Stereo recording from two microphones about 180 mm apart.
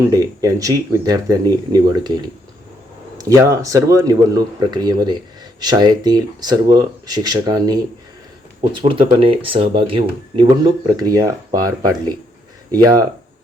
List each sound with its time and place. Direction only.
0.0 s speech: 20° right (ahead or behind)
3.2 s speech: 20° right (ahead or behind)